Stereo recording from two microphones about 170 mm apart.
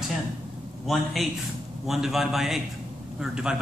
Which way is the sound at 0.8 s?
Centre (ahead or behind).